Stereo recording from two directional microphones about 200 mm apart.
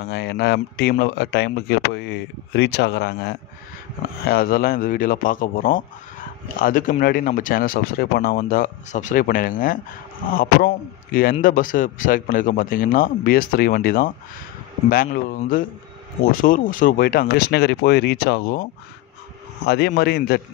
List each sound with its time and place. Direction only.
0.0 s speech: 55° left (ahead or behind)